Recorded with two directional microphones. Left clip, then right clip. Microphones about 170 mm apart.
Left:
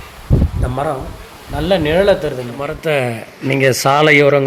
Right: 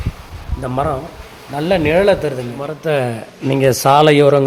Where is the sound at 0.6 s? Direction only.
10° right (ahead or behind).